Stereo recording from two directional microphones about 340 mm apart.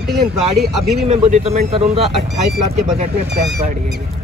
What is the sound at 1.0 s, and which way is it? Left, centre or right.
Speech, centre.